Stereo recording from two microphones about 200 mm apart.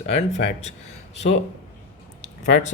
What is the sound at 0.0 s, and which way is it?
Speech, 35° left (ahead or behind).